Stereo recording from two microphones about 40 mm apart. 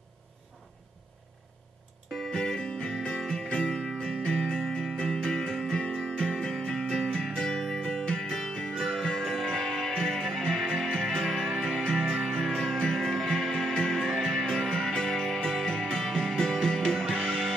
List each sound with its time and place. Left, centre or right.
2.1 s music: centre